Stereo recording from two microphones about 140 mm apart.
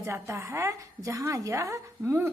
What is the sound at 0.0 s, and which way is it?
A woman's voice, 20° right (ahead or behind).